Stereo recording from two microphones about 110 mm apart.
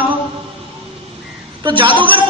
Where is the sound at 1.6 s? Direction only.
50° right (ahead or behind).